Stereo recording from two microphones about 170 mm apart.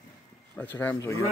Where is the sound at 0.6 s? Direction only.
10° left (ahead or behind).